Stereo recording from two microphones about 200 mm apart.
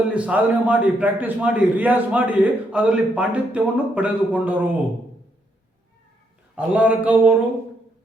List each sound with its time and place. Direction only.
0.1 s a man's voice: 5° right (ahead or behind)
6.6 s a man's voice: 5° right (ahead or behind)